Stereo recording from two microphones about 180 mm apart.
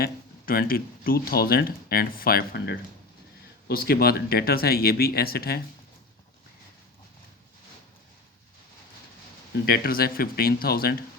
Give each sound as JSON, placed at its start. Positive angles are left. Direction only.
{"t": 0.0, "sound": "speech", "side_deg": 55}
{"t": 9.6, "sound": "speech", "side_deg": 55}